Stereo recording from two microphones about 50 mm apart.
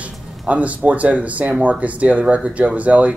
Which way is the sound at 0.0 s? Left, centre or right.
Right.